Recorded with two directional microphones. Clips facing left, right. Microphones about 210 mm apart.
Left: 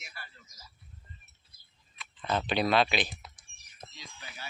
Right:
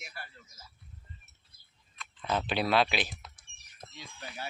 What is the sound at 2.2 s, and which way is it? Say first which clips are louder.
Speech: left 2 dB; 10° right (ahead or behind).